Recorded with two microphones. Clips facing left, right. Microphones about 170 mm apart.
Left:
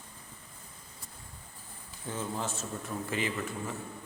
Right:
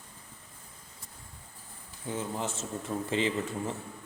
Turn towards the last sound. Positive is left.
turn(degrees=-25)  # may be behind; listen again after turning